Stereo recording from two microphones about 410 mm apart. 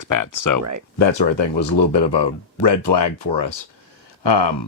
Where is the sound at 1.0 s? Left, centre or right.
Left.